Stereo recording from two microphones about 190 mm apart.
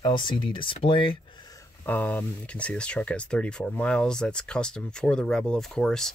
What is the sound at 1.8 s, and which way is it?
Speech, 10° left (ahead or behind).